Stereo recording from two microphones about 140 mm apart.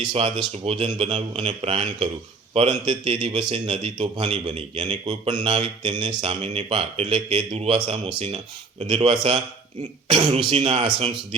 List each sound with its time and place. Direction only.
0.0 s speech: 40° right (ahead or behind)